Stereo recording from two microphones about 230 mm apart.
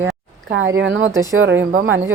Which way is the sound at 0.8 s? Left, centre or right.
Right.